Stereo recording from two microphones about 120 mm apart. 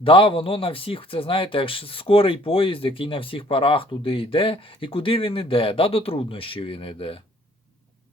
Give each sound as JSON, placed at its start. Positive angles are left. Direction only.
{"t": 0.0, "sound": "speech", "side_deg": 45}